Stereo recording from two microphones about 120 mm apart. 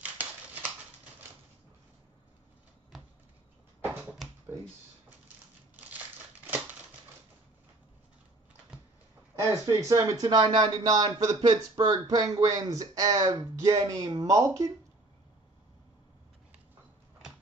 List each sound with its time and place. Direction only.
0.0 s a sound: 15° right (ahead or behind)
5.9 s crumpling: 15° right (ahead or behind)
9.7 s speech: 30° right (ahead or behind)